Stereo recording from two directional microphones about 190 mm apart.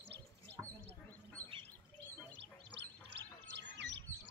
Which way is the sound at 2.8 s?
65° right (ahead or behind).